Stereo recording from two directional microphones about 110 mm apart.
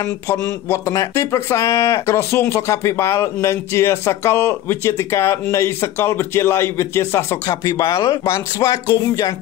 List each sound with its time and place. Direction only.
0.3 s speech: 30° left (ahead or behind)